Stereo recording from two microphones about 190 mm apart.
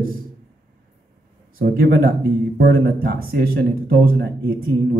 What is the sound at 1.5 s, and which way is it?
Speech, 55° right (ahead or behind).